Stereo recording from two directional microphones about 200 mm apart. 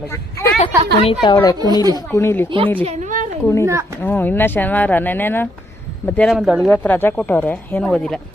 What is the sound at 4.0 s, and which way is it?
Speech, 10° left (ahead or behind).